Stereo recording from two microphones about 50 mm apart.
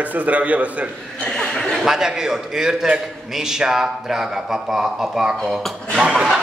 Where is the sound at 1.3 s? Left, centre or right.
Centre.